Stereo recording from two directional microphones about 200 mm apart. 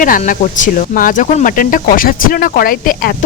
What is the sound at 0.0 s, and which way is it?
Speech, 40° left (ahead or behind).